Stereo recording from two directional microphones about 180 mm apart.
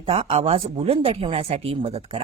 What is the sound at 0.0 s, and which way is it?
Speech, 35° right (ahead or behind).